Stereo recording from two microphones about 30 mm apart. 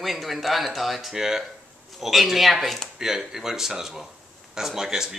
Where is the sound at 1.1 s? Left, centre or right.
Centre.